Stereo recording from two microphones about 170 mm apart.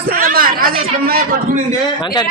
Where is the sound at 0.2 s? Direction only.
60° right (ahead or behind).